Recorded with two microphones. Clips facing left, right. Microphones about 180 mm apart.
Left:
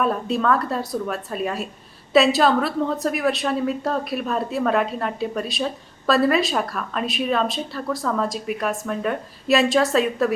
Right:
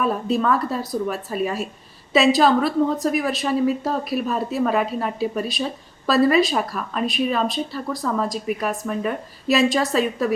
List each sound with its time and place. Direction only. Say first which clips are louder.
0.0 s a woman's voice: even; centre (ahead or behind)